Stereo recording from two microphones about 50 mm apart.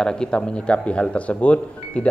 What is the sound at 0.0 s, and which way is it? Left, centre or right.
A man's voice, centre.